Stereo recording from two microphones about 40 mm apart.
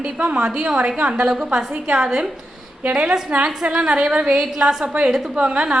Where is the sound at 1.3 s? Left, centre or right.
Centre.